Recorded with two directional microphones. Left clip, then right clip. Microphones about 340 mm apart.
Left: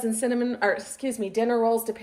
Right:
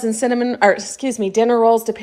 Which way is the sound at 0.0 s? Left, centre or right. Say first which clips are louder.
Right 8 dB; centre.